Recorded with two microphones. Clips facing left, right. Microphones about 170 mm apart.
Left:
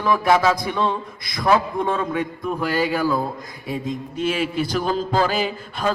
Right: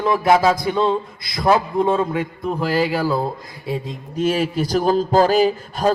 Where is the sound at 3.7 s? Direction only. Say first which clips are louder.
Even; 35° right (ahead or behind).